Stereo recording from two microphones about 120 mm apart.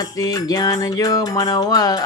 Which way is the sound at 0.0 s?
30° left (ahead or behind).